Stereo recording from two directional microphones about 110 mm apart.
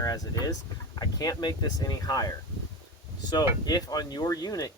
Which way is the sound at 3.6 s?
35° left (ahead or behind).